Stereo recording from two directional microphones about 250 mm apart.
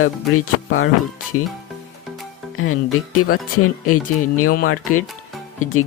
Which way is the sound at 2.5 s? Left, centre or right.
Left.